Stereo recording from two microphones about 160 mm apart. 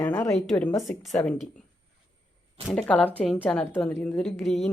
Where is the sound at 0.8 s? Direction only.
5° left (ahead or behind).